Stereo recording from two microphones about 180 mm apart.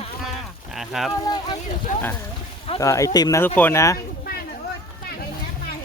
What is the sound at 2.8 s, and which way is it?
Speech, 15° left (ahead or behind).